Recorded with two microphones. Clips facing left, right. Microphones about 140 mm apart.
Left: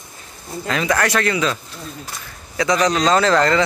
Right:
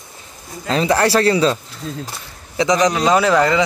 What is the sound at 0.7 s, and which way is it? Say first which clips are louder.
Speech: right 4 dB; 30° right (ahead or behind).